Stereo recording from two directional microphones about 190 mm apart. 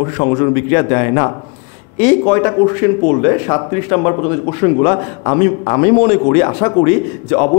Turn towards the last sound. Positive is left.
turn(degrees=30)  # may be behind; listen again after turning